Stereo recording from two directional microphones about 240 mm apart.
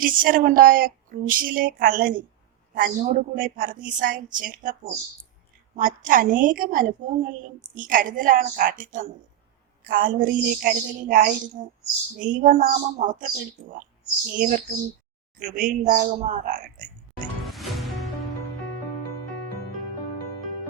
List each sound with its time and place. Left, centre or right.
0.0 s a woman's voice: right
17.4 s music: centre